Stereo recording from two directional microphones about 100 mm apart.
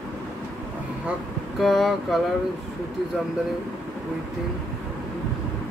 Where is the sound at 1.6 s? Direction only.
Centre (ahead or behind).